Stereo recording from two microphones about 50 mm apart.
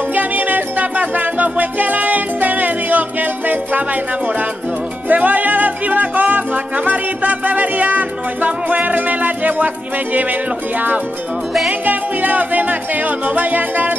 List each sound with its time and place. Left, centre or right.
0.1 s music: right
5.0 s music: right
11.8 s music: right